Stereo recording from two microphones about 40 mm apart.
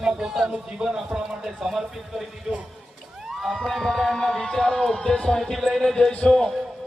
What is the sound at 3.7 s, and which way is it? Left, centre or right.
Speech, centre.